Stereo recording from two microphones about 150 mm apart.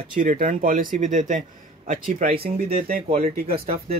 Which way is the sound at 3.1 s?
40° right (ahead or behind).